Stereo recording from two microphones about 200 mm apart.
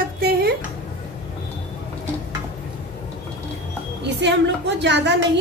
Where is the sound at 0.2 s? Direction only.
50° right (ahead or behind).